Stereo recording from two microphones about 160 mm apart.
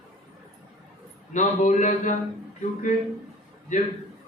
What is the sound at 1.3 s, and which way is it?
Speech, 50° left (ahead or behind).